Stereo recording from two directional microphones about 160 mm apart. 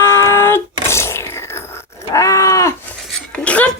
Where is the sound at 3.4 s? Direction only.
10° left (ahead or behind).